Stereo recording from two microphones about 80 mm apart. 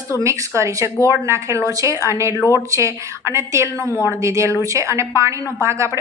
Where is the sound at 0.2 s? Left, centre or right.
Right.